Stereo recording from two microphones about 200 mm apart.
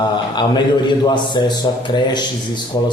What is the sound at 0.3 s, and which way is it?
A man's voice, 20° left (ahead or behind).